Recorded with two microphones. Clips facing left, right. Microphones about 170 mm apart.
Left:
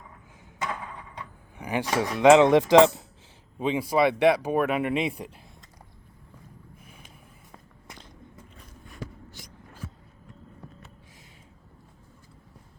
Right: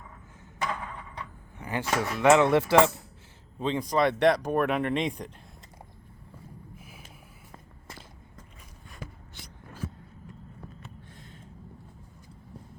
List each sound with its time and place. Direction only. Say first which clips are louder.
1.5 s speech: left 3 dB; 15° left (ahead or behind)
3.6 s speech: left 2 dB; 10° left (ahead or behind)
6.7 s a sound: right 2 dB; 5° right (ahead or behind)